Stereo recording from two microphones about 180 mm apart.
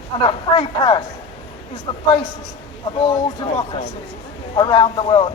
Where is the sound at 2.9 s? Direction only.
25° left (ahead or behind).